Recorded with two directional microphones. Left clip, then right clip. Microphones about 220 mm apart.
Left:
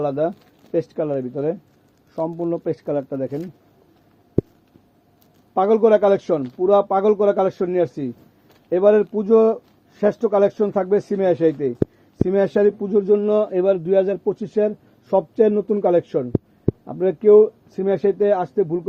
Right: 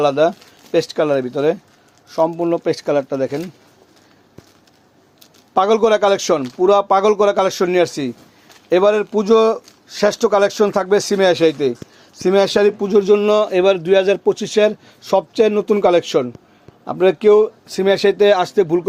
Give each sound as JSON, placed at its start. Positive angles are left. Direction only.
{"t": 0.0, "sound": "speech", "side_deg": -15}
{"t": 5.5, "sound": "speech", "side_deg": -15}